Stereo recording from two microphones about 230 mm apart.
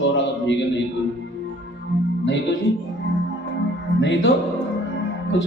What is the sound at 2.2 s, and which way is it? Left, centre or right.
Speech, left.